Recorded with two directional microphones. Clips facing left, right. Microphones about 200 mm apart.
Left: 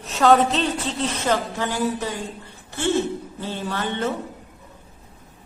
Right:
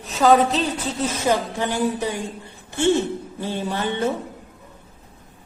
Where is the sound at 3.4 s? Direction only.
15° right (ahead or behind).